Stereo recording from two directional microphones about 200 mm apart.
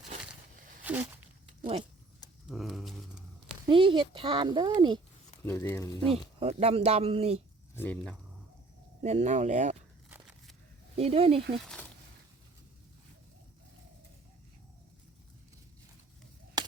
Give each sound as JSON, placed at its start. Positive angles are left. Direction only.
{"t": 0.9, "sound": "a sound", "side_deg": -5}
{"t": 1.6, "sound": "speech", "side_deg": -25}
{"t": 2.5, "sound": "a sound", "side_deg": 0}
{"t": 3.7, "sound": "speech", "side_deg": -25}
{"t": 5.5, "sound": "speech", "side_deg": 10}
{"t": 6.1, "sound": "speech", "side_deg": -30}
{"t": 7.8, "sound": "speech", "side_deg": 5}
{"t": 9.0, "sound": "speech", "side_deg": -35}
{"t": 10.9, "sound": "speech", "side_deg": -30}